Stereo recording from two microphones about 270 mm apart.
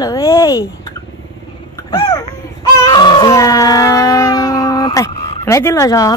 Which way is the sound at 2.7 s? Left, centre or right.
Centre.